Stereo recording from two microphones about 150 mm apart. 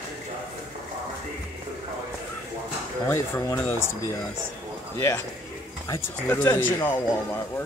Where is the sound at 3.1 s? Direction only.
20° left (ahead or behind).